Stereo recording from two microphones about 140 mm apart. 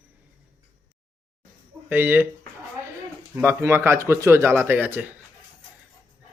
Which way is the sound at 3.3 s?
15° right (ahead or behind).